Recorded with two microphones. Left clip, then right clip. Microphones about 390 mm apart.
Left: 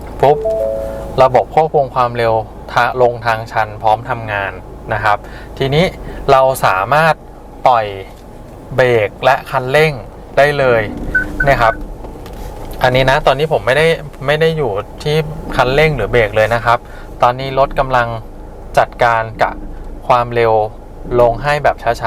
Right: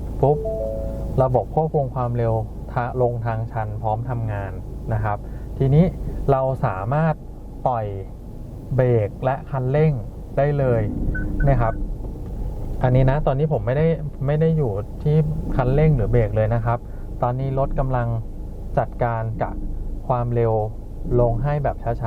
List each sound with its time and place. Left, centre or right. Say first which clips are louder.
0.9 s doorbell: left 11 dB; centre
1.4 s speech: left 10 dB; centre
2.0 s speech: left 11 dB; centre
12.8 s speech: left 10 dB; centre